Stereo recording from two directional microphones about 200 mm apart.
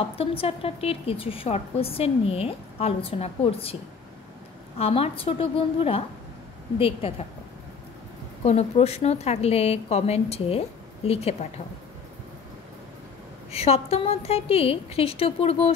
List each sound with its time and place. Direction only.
0.2 s a woman's voice: 30° left (ahead or behind)
4.7 s a woman's voice: 30° left (ahead or behind)
8.5 s a woman's voice: 30° left (ahead or behind)
13.5 s a woman's voice: 30° left (ahead or behind)